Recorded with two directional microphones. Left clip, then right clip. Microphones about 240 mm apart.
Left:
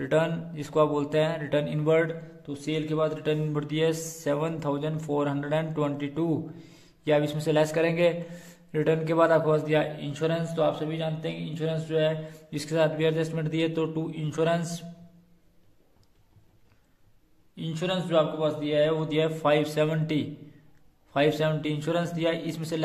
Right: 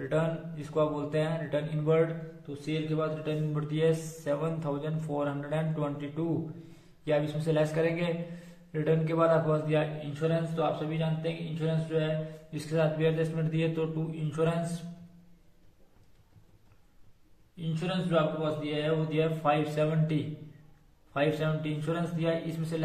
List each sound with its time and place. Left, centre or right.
0.0 s a man's voice: left
17.6 s a man's voice: left